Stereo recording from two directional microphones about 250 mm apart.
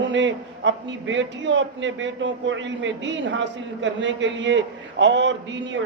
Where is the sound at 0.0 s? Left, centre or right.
Right.